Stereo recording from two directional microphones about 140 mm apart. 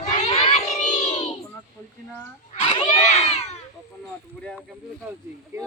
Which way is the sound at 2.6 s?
50° left (ahead or behind).